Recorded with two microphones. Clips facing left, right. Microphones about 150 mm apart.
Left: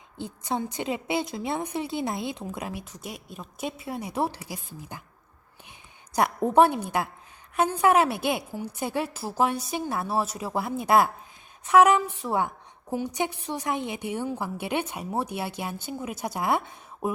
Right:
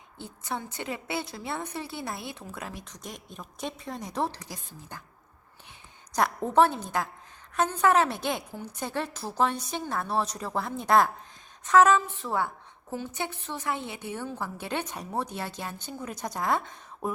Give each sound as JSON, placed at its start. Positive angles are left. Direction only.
{"t": 0.2, "sound": "a woman's voice", "side_deg": 15}
{"t": 6.1, "sound": "a woman's voice", "side_deg": 15}